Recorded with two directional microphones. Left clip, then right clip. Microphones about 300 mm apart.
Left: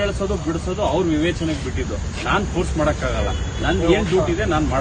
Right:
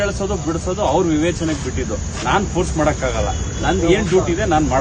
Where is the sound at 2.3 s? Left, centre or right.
Centre.